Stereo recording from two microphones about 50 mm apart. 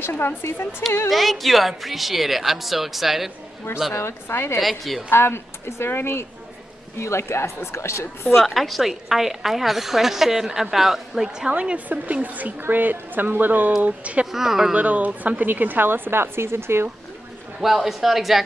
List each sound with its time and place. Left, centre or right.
0.0 s speech: left
0.4 s speech: left
1.1 s a woman's voice: centre
3.9 s speech: left
4.6 s a woman's voice: centre
5.1 s speech: left
7.0 s speech: left
8.4 s a woman's voice: centre
11.4 s a woman's voice: right
13.8 s speech: right
14.3 s speech: centre
14.7 s a woman's voice: right
17.6 s a woman's voice: centre